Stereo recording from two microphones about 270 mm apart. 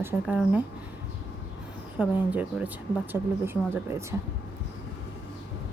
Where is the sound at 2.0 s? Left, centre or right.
Centre.